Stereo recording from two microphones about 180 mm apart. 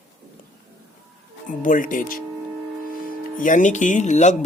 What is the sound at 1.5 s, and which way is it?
Speech, 50° left (ahead or behind).